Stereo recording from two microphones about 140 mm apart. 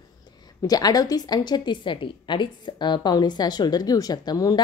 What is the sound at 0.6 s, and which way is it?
A woman's voice, 25° left (ahead or behind).